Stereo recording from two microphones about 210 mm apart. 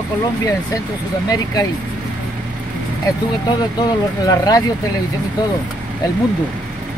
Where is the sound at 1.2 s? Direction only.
15° left (ahead or behind).